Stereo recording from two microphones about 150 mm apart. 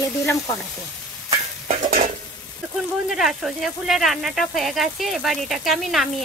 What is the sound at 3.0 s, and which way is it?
Speech, centre (ahead or behind).